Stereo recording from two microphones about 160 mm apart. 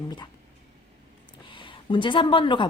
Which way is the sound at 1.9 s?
30° left (ahead or behind).